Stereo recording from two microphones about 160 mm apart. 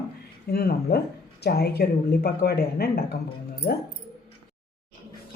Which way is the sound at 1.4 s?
85° left.